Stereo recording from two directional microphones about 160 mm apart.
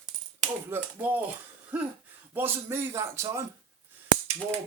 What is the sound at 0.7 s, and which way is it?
Speech, 10° right (ahead or behind).